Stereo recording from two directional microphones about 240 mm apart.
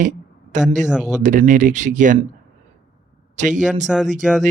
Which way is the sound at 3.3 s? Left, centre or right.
Right.